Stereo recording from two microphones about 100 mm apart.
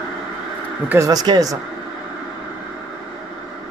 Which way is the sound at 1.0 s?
40° right (ahead or behind).